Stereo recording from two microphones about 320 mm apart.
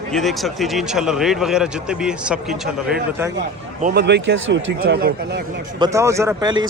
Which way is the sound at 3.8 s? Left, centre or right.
Right.